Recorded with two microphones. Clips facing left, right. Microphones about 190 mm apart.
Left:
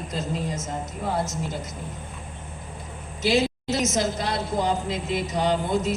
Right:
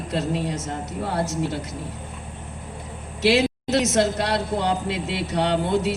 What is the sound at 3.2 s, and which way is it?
Speech, 70° right (ahead or behind).